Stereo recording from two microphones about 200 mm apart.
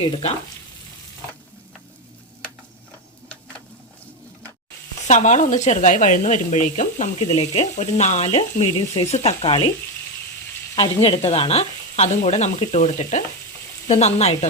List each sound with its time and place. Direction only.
0.0 s speech: 30° left (ahead or behind)
5.0 s speech: 35° left (ahead or behind)
10.8 s speech: 30° left (ahead or behind)